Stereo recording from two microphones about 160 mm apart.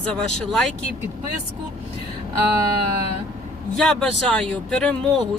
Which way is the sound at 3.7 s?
5° left (ahead or behind).